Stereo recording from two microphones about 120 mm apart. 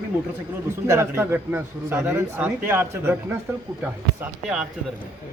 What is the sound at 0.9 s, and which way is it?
A man's voice, 20° right (ahead or behind).